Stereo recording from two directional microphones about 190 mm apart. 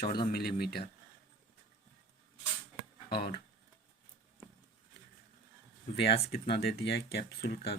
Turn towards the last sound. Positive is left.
turn(degrees=55)  # may be behind; listen again after turning